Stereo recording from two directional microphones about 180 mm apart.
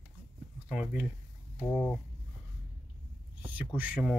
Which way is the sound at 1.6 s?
15° left (ahead or behind).